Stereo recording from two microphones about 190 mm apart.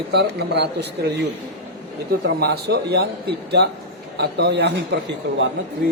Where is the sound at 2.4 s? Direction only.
60° right (ahead or behind).